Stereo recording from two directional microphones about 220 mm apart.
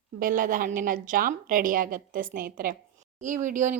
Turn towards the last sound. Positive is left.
turn(degrees=-35)  # may be behind; listen again after turning